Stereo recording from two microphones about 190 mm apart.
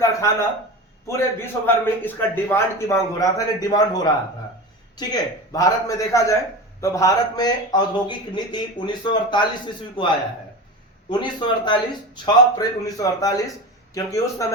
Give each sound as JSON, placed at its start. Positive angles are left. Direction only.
{"t": 0.0, "sound": "a sound", "side_deg": 15}
{"t": 1.0, "sound": "a man's voice", "side_deg": 10}
{"t": 11.1, "sound": "a man's voice", "side_deg": 25}